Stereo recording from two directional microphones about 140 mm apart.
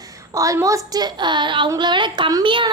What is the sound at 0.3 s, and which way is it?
A woman's voice, 20° right (ahead or behind).